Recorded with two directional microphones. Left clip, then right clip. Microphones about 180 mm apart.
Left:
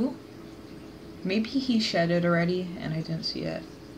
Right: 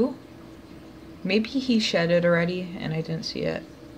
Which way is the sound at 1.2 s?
30° right (ahead or behind).